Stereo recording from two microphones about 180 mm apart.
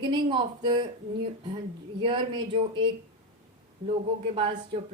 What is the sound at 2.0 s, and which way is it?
Speech, 25° right (ahead or behind).